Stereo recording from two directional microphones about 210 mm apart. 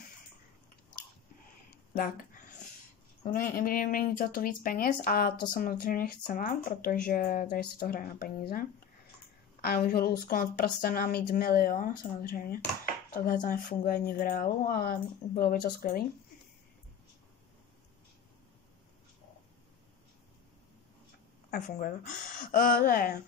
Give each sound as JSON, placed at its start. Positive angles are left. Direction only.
{"t": 2.0, "sound": "a sound", "side_deg": 40}
{"t": 3.3, "sound": "speech", "side_deg": 40}
{"t": 21.5, "sound": "speech", "side_deg": 45}